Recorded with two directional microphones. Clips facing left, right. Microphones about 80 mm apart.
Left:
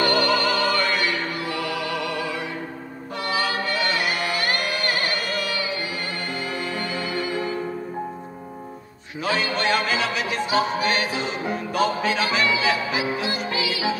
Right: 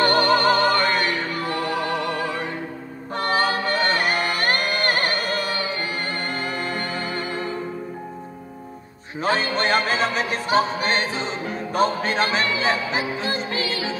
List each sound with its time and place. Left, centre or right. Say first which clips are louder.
0.0 s music: right 3 dB; right
9.2 s speech: right 2 dB; right